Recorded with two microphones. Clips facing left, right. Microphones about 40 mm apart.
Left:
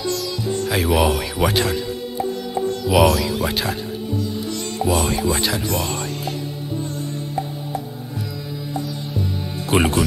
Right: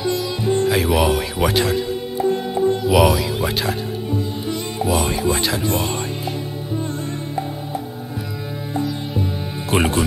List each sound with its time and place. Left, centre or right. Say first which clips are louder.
0.0 s sitar: right 3 dB; right
0.7 s a man's voice: left 2 dB; centre
2.3 s music: right 4 dB; right
2.9 s a man's voice: left 3 dB; centre
4.2 s music: right 1 dB; centre
4.8 s a man's voice: even; centre
5.7 s speech: right 2 dB; right
9.7 s speech: left 1 dB; centre